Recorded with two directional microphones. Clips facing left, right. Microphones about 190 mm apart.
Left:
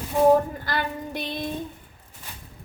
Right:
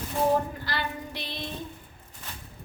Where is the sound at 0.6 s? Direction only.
50° left (ahead or behind).